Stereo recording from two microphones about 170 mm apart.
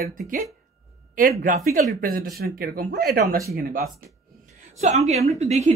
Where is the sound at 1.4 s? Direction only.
50° right (ahead or behind).